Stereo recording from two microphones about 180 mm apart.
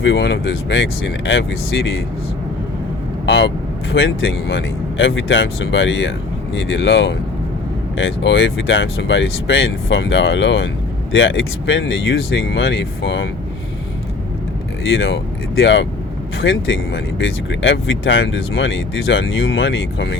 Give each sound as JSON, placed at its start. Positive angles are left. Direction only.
{"t": 0.0, "sound": "speech", "side_deg": 90}
{"t": 3.2, "sound": "speech", "side_deg": 75}
{"t": 3.9, "sound": "speech", "side_deg": 90}
{"t": 14.8, "sound": "speech", "side_deg": 90}